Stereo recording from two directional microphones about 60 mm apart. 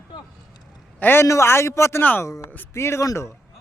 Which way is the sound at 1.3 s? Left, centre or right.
Left.